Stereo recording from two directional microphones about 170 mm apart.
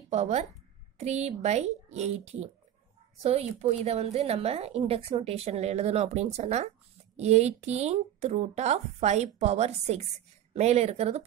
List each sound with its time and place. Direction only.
0.1 s a woman's voice: 40° right (ahead or behind)